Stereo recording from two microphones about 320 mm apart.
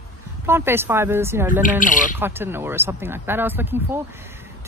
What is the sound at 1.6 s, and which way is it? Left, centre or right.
Speech, left.